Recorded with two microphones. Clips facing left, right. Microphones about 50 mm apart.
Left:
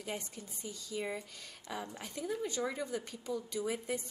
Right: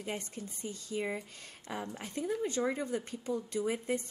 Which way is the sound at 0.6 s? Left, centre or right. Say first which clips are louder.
Right 3 dB; right.